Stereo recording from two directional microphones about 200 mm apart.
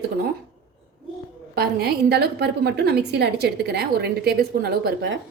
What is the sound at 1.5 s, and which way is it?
A woman's voice, 50° right (ahead or behind).